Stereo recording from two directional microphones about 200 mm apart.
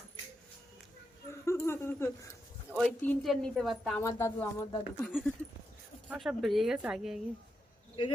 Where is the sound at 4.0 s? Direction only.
15° left (ahead or behind); by 7.1 s centre (ahead or behind).